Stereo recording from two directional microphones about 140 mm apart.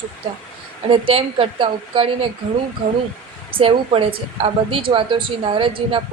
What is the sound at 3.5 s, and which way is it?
Speech, 40° right (ahead or behind).